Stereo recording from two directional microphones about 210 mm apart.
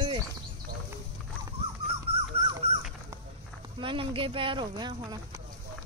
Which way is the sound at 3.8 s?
25° right (ahead or behind).